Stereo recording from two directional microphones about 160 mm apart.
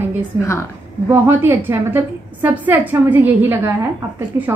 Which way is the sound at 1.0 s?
15° right (ahead or behind).